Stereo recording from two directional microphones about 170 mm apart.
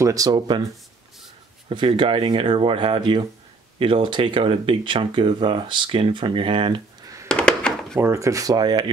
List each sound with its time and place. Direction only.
0.0 s speech: 20° right (ahead or behind)
1.7 s speech: 30° right (ahead or behind)
7.2 s a sound: 5° left (ahead or behind)
8.0 s speech: 15° right (ahead or behind)